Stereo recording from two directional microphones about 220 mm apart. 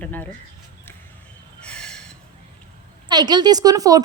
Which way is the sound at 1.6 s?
5° left (ahead or behind).